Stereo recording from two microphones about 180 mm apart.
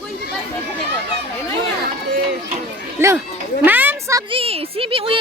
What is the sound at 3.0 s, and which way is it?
Speech, 15° right (ahead or behind).